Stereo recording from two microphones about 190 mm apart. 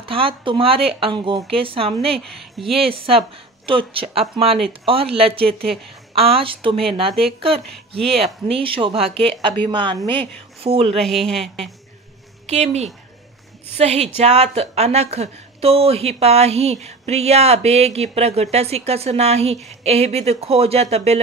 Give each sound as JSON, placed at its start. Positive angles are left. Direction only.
{"t": 0.0, "sound": "speech", "side_deg": -30}
{"t": 8.5, "sound": "a woman's voice", "side_deg": -30}
{"t": 11.0, "sound": "speech", "side_deg": 0}
{"t": 12.4, "sound": "a woman's voice", "side_deg": -35}